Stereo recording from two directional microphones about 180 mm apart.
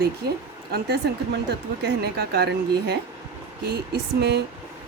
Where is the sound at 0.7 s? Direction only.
65° right (ahead or behind).